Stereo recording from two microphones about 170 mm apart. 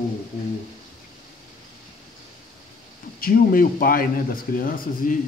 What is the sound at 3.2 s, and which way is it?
Speech, 55° left (ahead or behind).